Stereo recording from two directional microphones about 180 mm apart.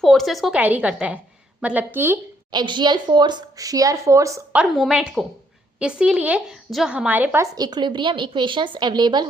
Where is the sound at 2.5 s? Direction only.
25° right (ahead or behind).